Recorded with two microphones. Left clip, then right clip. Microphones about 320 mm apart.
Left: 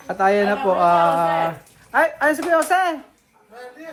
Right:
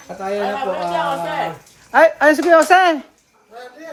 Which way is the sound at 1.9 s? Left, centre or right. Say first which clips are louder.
Right 6 dB; right.